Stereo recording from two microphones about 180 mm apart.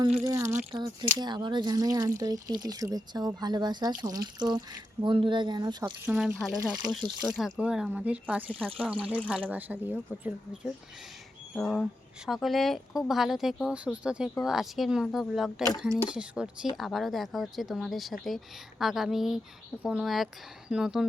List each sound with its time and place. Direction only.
0.3 s speech: 15° right (ahead or behind)
6.1 s speech: 5° right (ahead or behind)
6.6 s speech: 25° right (ahead or behind)
7.3 s speech: centre (ahead or behind)
11.5 s speech: 5° left (ahead or behind)